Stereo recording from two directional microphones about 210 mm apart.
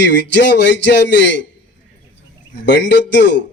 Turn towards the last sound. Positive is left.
turn(degrees=55)  # may be behind; listen again after turning